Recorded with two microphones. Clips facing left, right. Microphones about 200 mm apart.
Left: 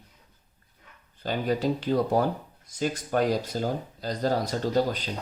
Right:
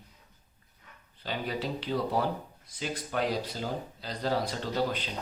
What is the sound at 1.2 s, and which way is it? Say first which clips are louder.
Speech: left 7 dB; 45° left (ahead or behind).